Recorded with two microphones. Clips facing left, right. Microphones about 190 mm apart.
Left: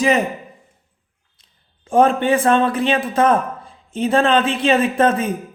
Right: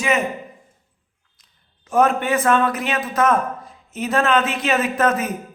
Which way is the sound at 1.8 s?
30° left (ahead or behind).